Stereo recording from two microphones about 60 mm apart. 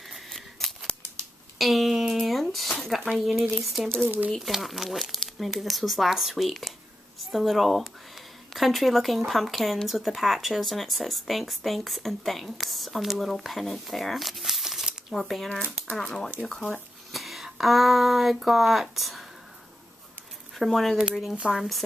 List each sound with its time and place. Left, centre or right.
0.3 s scissors: centre
1.6 s a sound: centre
2.9 s speech: centre
4.0 s speech: right
4.3 s speech: centre
17.1 s speech: centre
20.5 s speech: centre